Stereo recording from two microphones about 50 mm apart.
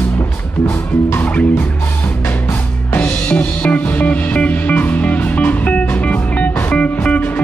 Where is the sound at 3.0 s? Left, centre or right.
Left.